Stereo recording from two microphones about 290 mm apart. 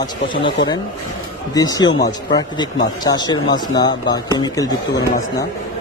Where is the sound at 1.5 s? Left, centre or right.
Centre.